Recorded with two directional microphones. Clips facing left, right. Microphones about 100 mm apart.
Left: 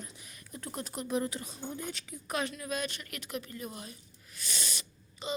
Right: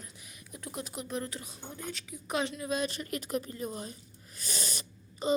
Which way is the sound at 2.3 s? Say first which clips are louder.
Right 3 dB; 20° right (ahead or behind).